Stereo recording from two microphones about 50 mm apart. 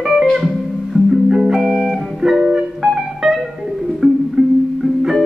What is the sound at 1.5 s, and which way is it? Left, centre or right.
Music, centre.